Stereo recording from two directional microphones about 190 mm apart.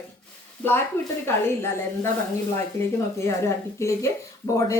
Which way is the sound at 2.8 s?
15° left (ahead or behind).